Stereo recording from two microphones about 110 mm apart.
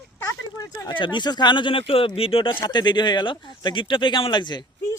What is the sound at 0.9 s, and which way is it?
Speech, 45° left (ahead or behind).